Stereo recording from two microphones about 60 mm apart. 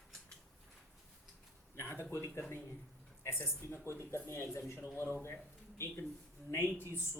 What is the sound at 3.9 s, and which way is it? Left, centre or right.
Speech, left.